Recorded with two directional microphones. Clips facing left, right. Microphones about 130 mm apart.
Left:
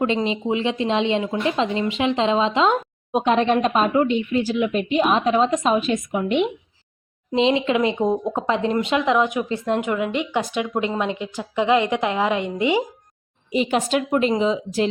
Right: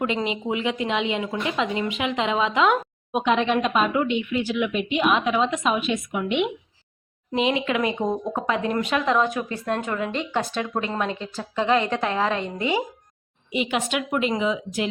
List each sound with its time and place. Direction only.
0.0 s speech: 25° left (ahead or behind)
7.3 s a woman's voice: 25° left (ahead or behind)
13.5 s speech: 40° left (ahead or behind)